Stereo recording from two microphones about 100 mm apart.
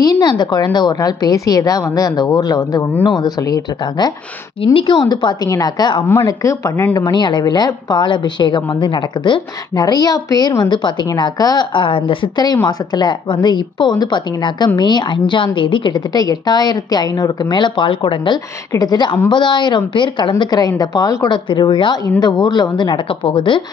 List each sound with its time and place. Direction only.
0.0 s a woman's voice: 40° left (ahead or behind)
4.7 s a woman's voice: 55° left (ahead or behind)
6.2 s a woman's voice: 35° left (ahead or behind)
7.0 s a woman's voice: 45° left (ahead or behind)
12.6 s a woman's voice: 50° left (ahead or behind)
18.7 s a woman's voice: 40° left (ahead or behind)
23.0 s speech: 60° left (ahead or behind)